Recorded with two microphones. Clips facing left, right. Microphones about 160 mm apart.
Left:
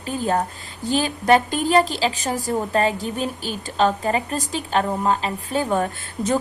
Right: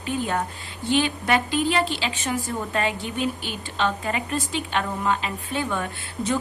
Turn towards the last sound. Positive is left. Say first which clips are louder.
# left 3 dB
turn(degrees=40)  # may be behind; listen again after turning